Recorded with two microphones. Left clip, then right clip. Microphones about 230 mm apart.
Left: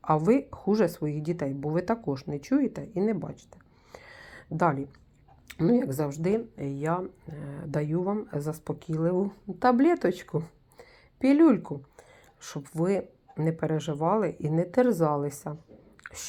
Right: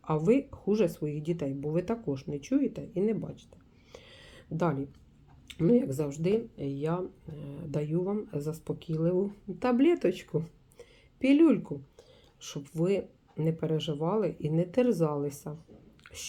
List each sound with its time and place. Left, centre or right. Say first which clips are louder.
0.0 s speech: left 3 dB; left
4.4 s a sound: left 5 dB; left
5.5 s speech: left 1 dB; left
6.6 s speech: left 1 dB; left
6.8 s speech: left 5 dB; left